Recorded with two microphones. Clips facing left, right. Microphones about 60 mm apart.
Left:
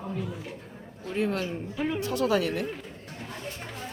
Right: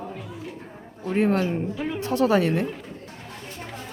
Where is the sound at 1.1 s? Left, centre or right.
Right.